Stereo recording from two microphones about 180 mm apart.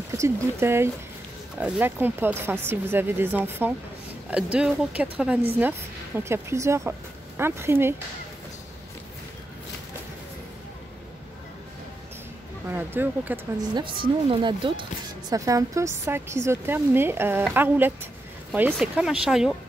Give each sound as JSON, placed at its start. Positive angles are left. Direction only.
{"t": 0.1, "sound": "speech", "side_deg": -15}
{"t": 12.6, "sound": "speech", "side_deg": -10}
{"t": 13.6, "sound": "speech", "side_deg": -25}